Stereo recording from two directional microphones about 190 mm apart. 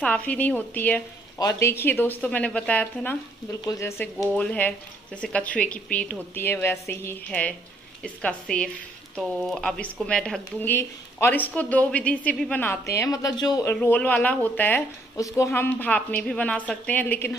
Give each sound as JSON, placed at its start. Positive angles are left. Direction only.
{"t": 0.0, "sound": "speech", "side_deg": 5}
{"t": 4.2, "sound": "a woman's voice", "side_deg": 5}
{"t": 13.7, "sound": "speech", "side_deg": 10}